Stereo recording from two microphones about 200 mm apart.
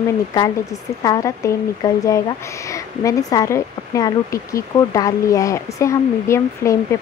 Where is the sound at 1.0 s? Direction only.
15° left (ahead or behind).